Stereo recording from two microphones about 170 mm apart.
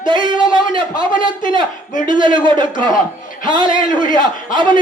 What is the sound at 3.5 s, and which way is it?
A man's voice, 30° right (ahead or behind).